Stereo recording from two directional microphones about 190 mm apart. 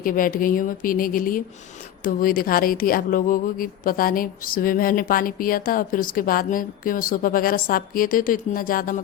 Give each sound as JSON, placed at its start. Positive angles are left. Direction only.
{"t": 0.0, "sound": "speech", "side_deg": 45}